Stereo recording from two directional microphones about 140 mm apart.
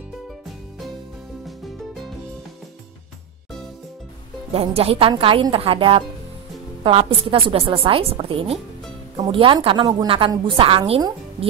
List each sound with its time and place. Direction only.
4.5 s a woman's voice: 45° right (ahead or behind)